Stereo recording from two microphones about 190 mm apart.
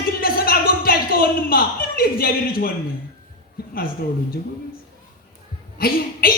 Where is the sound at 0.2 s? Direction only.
50° left (ahead or behind).